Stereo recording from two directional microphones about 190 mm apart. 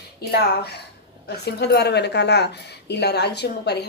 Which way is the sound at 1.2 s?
60° left (ahead or behind).